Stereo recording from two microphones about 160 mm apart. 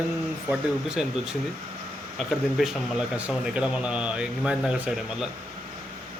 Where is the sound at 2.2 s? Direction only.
Centre (ahead or behind).